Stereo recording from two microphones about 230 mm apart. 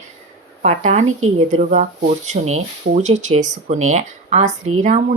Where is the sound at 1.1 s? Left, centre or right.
Right.